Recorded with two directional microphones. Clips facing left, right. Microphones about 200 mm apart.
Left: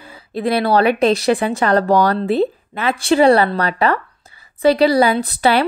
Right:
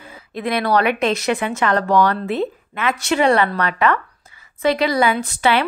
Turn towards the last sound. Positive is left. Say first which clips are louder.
# left 3 dB
turn(degrees=35)  # may be behind; listen again after turning